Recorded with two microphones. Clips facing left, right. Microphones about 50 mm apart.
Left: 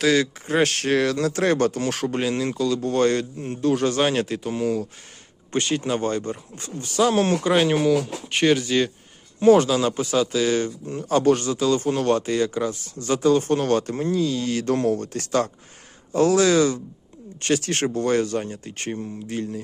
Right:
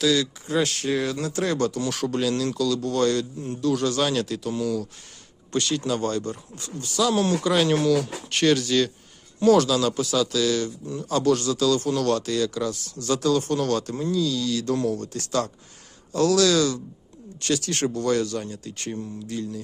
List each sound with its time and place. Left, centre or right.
0.0 s speech: left
0.9 s speech: left
1.3 s speech: left; by 8.9 s centre
9.4 s speech: left